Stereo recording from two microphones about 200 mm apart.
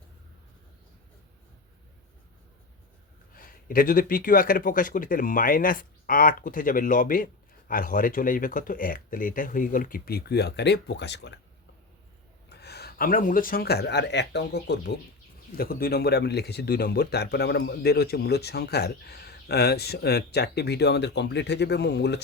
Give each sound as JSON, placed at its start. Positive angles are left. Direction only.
{"t": 3.3, "sound": "speech", "side_deg": 45}
{"t": 12.5, "sound": "speech", "side_deg": 55}
{"t": 15.5, "sound": "speech", "side_deg": 50}